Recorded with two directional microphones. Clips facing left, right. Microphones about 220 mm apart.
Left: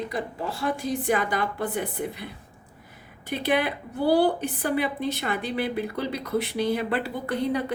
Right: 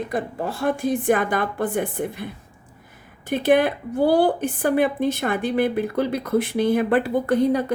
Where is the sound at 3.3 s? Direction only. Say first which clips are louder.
Right 7 dB; 50° right (ahead or behind).